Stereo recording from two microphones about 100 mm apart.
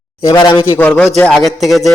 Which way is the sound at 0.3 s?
40° left (ahead or behind).